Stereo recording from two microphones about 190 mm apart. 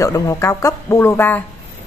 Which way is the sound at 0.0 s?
15° left (ahead or behind).